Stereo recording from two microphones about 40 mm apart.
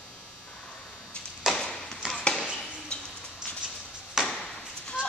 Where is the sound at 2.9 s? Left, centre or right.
Left.